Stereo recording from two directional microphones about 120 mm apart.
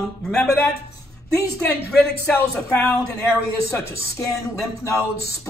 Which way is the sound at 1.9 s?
5° left (ahead or behind).